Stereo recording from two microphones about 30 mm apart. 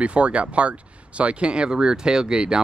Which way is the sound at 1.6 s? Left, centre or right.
Right.